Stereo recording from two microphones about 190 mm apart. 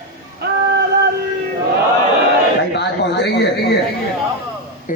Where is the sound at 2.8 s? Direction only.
60° left (ahead or behind).